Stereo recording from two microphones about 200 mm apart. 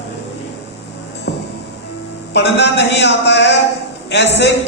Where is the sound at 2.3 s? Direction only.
60° left (ahead or behind).